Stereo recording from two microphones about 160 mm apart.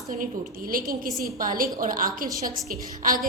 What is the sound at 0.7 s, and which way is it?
A woman's voice, 65° right (ahead or behind).